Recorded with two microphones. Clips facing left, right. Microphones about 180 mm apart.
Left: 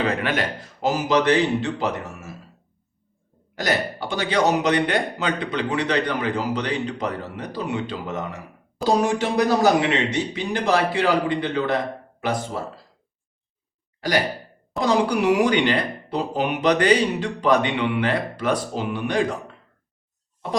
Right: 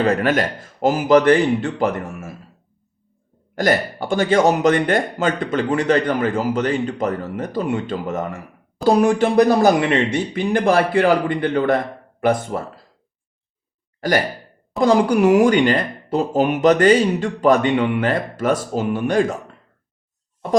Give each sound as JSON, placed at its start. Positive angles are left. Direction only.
{"t": 0.0, "sound": "a man's voice", "side_deg": -45}
{"t": 3.5, "sound": "a man's voice", "side_deg": -50}
{"t": 14.0, "sound": "sigh", "side_deg": -50}
{"t": 14.8, "sound": "a man's voice", "side_deg": -50}